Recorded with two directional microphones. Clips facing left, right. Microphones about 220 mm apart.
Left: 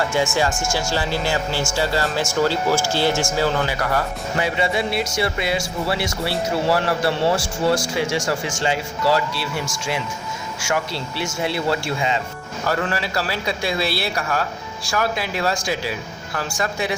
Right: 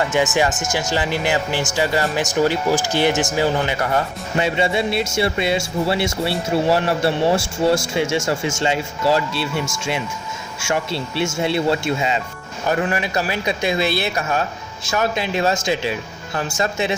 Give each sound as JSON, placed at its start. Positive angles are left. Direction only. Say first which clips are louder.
{"t": 0.1, "sound": "speech", "louder": "right 2 dB", "side_deg": -20}